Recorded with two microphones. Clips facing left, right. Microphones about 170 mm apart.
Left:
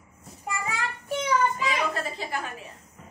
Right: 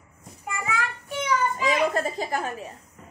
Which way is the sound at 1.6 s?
45° right (ahead or behind).